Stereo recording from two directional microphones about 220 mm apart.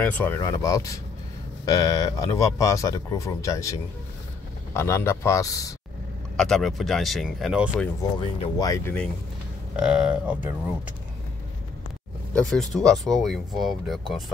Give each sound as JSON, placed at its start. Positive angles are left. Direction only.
{"t": 0.0, "sound": "speech", "side_deg": 10}
{"t": 6.3, "sound": "speech", "side_deg": 0}
{"t": 8.2, "sound": "speech", "side_deg": 20}
{"t": 9.8, "sound": "speech", "side_deg": -5}
{"t": 12.4, "sound": "speech", "side_deg": 0}